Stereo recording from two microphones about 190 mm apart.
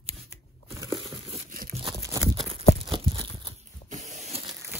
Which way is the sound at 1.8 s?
15° right (ahead or behind).